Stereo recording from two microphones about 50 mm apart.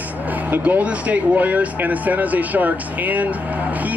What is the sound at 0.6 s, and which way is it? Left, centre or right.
Speech, right.